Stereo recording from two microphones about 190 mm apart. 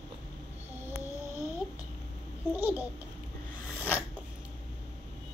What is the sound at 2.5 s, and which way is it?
Speech, 10° right (ahead or behind).